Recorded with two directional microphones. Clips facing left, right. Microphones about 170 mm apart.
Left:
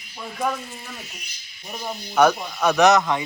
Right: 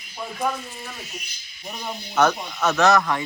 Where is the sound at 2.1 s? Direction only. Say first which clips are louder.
Left 3 dB; 10° left (ahead or behind).